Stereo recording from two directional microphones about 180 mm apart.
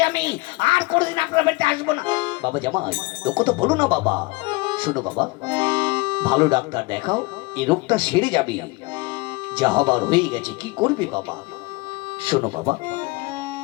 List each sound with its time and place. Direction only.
0.0 s speech: 25° right (ahead or behind)
12.2 s speech: 30° right (ahead or behind)